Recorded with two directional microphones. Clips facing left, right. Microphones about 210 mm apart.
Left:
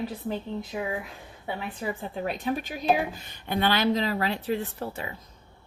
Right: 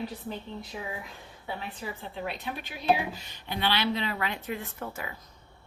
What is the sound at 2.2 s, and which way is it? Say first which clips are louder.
Speech: left 9 dB; 45° left (ahead or behind).